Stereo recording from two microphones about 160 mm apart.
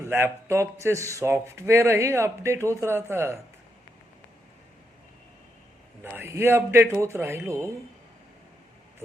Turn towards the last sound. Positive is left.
turn(degrees=-15)  # may be behind; listen again after turning